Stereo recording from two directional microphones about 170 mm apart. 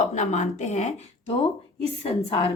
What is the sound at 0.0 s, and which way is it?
Speech, 45° left (ahead or behind).